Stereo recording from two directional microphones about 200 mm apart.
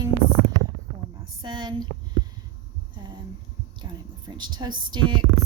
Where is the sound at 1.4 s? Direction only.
20° right (ahead or behind).